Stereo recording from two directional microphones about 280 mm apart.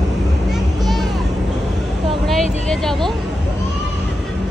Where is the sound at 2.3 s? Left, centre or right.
Centre.